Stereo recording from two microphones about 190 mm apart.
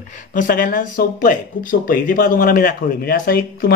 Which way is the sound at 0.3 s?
45° left (ahead or behind).